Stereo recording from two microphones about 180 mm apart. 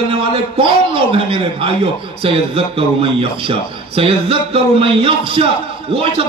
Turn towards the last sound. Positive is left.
turn(degrees=-30)  # may be behind; listen again after turning